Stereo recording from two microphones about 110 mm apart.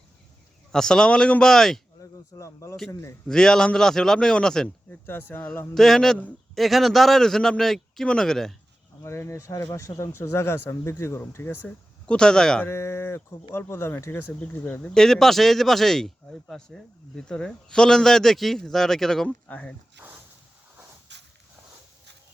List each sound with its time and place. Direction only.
0.7 s speech: 5° left (ahead or behind)
2.0 s speech: 30° left (ahead or behind)
3.2 s speech: 5° left (ahead or behind)
5.0 s speech: 20° left (ahead or behind)
5.7 s speech: centre (ahead or behind)
9.0 s speech: 25° left (ahead or behind)
12.0 s speech: 10° left (ahead or behind)
12.6 s speech: 25° left (ahead or behind); by 19.3 s 5° left (ahead or behind)
19.3 s speech: 15° left (ahead or behind)